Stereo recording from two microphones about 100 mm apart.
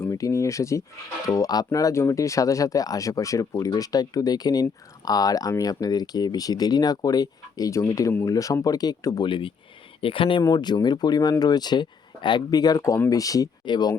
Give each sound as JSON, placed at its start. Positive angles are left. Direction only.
{"t": 0.0, "sound": "speech", "side_deg": 30}
{"t": 9.2, "sound": "speech", "side_deg": 55}
{"t": 10.4, "sound": "speech", "side_deg": 45}